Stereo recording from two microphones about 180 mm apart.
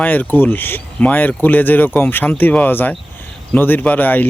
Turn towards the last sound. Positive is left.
turn(degrees=10)  # may be behind; listen again after turning